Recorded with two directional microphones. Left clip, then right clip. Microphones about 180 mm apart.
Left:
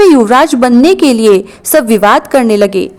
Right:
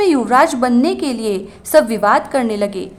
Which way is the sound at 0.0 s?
35° left (ahead or behind).